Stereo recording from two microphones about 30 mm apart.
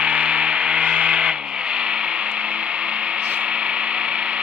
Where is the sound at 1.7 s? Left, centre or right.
Right.